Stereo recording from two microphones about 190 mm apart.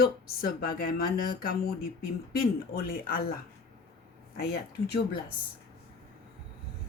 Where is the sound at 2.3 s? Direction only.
50° left (ahead or behind).